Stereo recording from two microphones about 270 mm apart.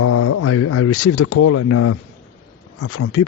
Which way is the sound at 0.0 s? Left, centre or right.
Left.